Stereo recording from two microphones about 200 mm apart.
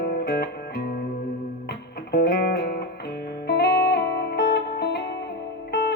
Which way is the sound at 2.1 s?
55° left (ahead or behind).